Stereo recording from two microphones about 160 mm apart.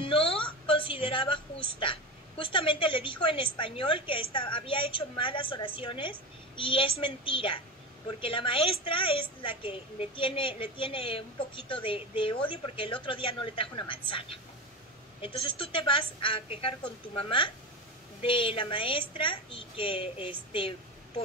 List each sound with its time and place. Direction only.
0.0 s a woman's voice: 35° left (ahead or behind)